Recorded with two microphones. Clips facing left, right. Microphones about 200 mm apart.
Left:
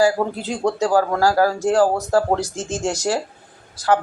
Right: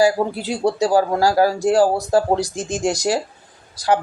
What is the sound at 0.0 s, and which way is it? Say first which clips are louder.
A woman's voice: right 1 dB; 10° right (ahead or behind).